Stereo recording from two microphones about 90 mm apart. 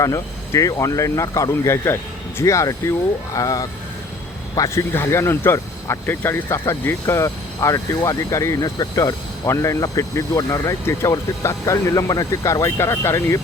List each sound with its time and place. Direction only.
0.0 s speech: 35° left (ahead or behind)